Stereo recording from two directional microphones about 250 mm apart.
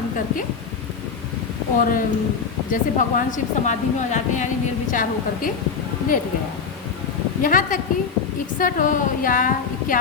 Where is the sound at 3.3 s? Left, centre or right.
Left.